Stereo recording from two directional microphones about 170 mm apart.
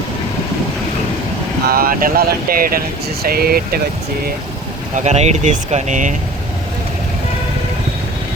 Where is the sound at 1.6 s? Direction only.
60° right (ahead or behind).